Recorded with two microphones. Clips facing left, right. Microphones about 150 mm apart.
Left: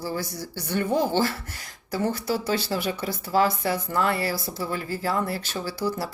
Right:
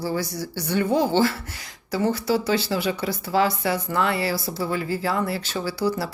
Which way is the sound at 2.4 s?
45° left (ahead or behind).